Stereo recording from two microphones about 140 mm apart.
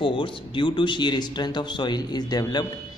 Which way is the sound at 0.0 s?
35° left (ahead or behind).